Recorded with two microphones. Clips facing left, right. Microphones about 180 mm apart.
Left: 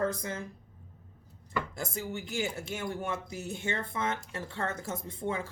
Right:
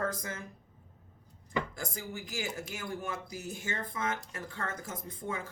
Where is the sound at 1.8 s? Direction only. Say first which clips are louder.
Left 4 dB; 25° left (ahead or behind).